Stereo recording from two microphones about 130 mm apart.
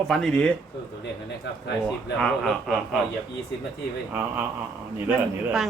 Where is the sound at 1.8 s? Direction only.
5° left (ahead or behind).